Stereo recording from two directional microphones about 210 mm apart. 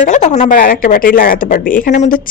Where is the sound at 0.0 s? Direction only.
35° left (ahead or behind).